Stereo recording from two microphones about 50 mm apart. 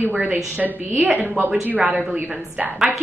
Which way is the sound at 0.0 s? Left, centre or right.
Right.